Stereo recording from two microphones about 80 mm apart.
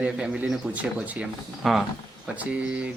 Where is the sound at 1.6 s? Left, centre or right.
Centre.